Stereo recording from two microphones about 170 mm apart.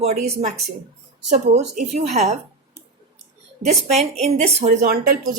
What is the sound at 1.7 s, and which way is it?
Speech, 40° right (ahead or behind).